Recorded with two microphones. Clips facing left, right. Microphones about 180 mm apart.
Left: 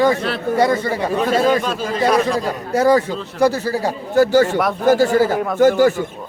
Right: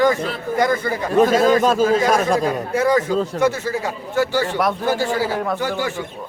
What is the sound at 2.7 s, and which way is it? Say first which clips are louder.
Speech: left 3 dB; 35° left (ahead or behind).